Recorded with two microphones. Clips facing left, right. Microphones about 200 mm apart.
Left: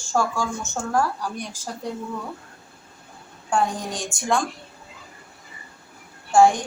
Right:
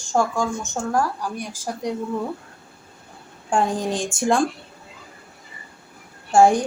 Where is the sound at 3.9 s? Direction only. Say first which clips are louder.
Right 4 dB; 30° right (ahead or behind).